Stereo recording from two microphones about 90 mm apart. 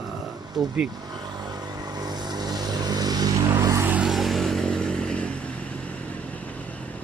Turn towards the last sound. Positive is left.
turn(degrees=15)  # may be behind; listen again after turning